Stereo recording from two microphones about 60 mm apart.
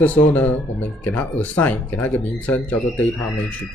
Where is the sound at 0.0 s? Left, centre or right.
Left.